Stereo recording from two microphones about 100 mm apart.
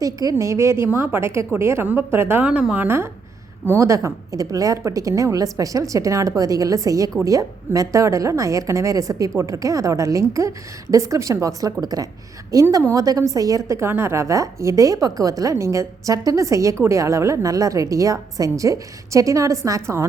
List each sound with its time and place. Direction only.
0.0 s a woman's voice: 35° right (ahead or behind)